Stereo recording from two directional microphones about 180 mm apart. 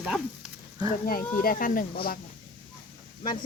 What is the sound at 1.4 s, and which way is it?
Speech, 50° left (ahead or behind).